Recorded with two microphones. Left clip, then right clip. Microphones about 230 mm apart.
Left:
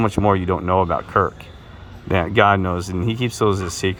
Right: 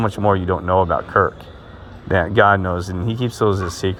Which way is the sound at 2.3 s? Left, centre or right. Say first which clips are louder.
Right 1 dB; centre.